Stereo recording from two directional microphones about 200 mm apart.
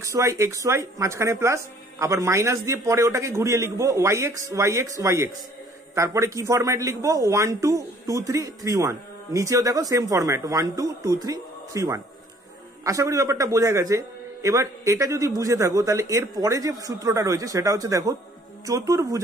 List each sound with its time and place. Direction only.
0.0 s a man's voice: 15° right (ahead or behind)